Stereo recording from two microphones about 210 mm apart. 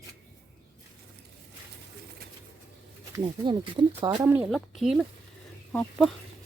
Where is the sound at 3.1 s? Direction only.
20° right (ahead or behind).